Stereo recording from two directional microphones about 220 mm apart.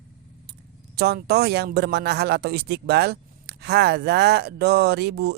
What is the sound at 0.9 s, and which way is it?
A man's voice, 45° right (ahead or behind).